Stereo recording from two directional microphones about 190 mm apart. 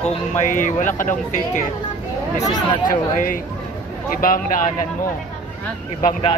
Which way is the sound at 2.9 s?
45° left (ahead or behind).